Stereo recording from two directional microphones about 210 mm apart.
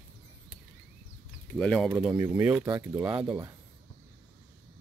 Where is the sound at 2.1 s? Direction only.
10° right (ahead or behind).